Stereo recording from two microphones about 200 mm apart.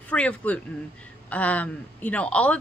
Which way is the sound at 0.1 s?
5° left (ahead or behind).